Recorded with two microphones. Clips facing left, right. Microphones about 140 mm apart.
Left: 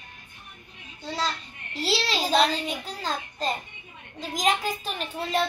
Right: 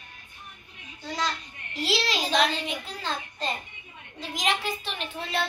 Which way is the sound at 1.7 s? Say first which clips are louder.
Left 1 dB; 35° left (ahead or behind).